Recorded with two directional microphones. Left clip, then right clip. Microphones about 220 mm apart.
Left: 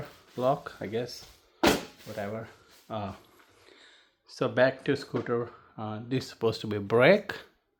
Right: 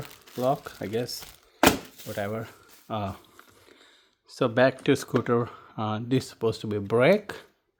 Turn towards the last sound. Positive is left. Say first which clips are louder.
# even
turn(degrees=-20)  # may be behind; listen again after turning